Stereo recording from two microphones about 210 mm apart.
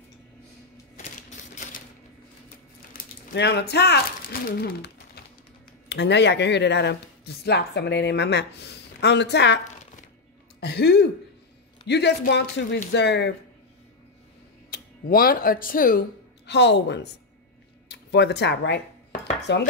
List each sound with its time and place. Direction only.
2.9 s speech: 55° left (ahead or behind)
10.6 s speech: 50° left (ahead or behind)
14.7 s speech: 45° left (ahead or behind)